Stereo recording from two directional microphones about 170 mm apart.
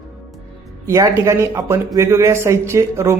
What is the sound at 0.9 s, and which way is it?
Speech, 20° right (ahead or behind).